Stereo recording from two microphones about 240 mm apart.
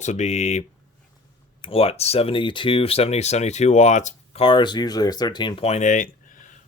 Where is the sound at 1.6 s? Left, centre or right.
Left.